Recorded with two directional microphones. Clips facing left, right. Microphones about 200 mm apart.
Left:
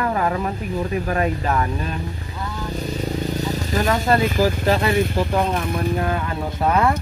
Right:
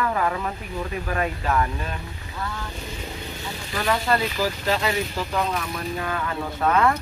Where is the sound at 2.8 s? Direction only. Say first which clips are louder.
Left 10 dB; 40° left (ahead or behind).